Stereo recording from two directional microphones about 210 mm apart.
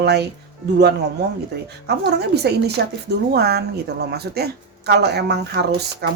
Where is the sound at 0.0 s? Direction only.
50° right (ahead or behind).